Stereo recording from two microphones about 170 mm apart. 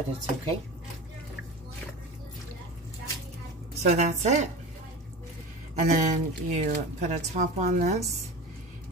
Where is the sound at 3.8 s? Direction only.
45° right (ahead or behind).